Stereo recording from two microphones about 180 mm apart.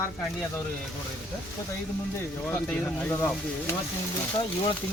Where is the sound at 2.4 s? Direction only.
10° left (ahead or behind).